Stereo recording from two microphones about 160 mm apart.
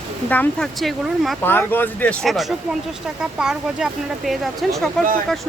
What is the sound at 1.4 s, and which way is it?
Speech, 10° left (ahead or behind).